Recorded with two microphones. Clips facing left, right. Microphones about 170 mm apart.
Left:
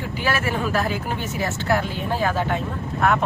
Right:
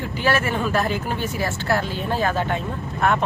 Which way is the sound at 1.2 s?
20° left (ahead or behind).